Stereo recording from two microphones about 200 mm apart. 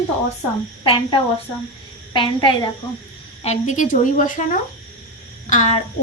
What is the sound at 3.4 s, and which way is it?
Speech, 35° left (ahead or behind).